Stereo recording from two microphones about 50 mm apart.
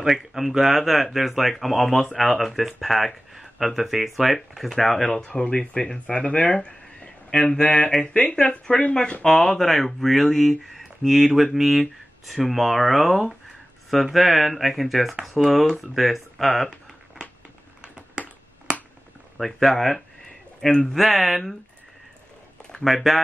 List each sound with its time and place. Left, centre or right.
0.0 s speech: centre
5.2 s speech: centre
7.6 s speech: left
8.4 s speech: centre
17.8 s typing: centre
19.3 s speech: centre
22.8 s speech: centre